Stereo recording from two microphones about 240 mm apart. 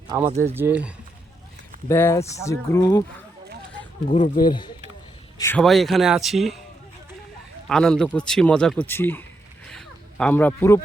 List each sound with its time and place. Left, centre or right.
0.3 s speech: centre
1.9 s speech: centre
4.1 s speech: left
5.4 s speech: centre
7.7 s speech: centre
9.6 s a sound: centre